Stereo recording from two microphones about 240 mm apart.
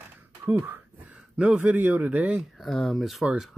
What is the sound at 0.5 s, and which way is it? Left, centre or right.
Speech, centre.